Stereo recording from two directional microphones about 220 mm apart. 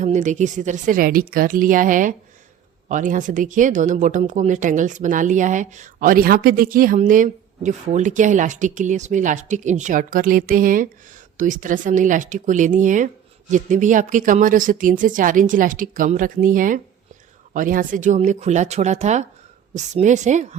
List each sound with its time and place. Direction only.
0.0 s speech: 35° right (ahead or behind)